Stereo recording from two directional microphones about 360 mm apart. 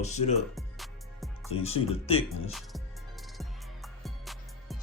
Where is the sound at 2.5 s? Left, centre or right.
Centre.